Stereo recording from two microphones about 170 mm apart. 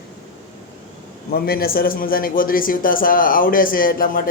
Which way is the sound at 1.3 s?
60° left (ahead or behind).